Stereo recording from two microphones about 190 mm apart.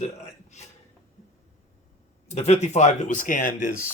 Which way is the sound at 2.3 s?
35° left (ahead or behind).